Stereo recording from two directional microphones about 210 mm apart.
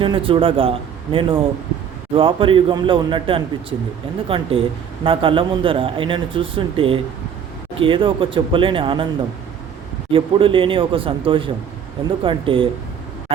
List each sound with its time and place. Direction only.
0.0 s speech: 25° right (ahead or behind)
10.1 s speech: 25° right (ahead or behind)